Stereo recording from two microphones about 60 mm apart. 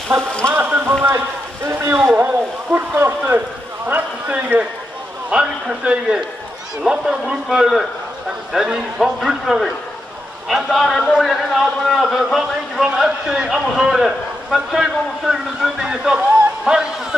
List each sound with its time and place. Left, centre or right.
0.1 s speech: right
1.7 s a man's voice: right; by 16.9 s centre